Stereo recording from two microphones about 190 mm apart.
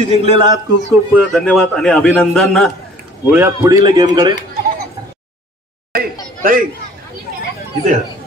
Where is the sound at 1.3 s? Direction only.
5° left (ahead or behind).